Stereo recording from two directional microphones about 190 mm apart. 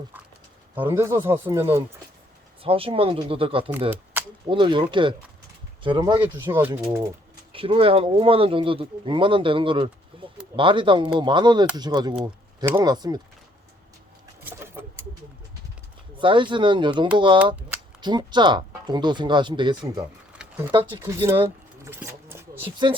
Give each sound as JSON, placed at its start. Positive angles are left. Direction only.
{"t": 0.8, "sound": "speech", "side_deg": -10}
{"t": 2.6, "sound": "speech", "side_deg": -30}
{"t": 3.7, "sound": "speech", "side_deg": -10}
{"t": 4.4, "sound": "speech", "side_deg": -25}
{"t": 6.3, "sound": "speech", "side_deg": -10}
{"t": 7.5, "sound": "speech", "side_deg": -30}
{"t": 14.4, "sound": "a sound", "side_deg": -10}
{"t": 16.1, "sound": "speech", "side_deg": -25}
{"t": 20.4, "sound": "a sound", "side_deg": -5}